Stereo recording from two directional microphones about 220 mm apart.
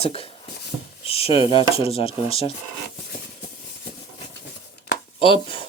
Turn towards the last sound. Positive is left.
turn(degrees=25)  # may be behind; listen again after turning